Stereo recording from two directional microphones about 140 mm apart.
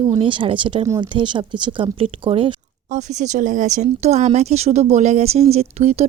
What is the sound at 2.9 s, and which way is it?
Speech, 60° right (ahead or behind).